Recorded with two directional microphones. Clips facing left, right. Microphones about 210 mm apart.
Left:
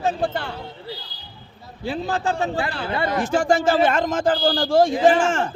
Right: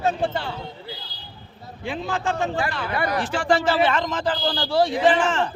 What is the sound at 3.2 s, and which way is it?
A woman's voice, 45° left (ahead or behind).